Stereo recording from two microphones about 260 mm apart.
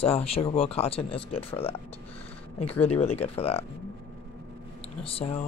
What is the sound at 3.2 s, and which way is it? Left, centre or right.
Speech, left.